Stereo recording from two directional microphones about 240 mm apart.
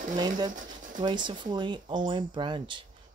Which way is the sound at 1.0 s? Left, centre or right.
Centre.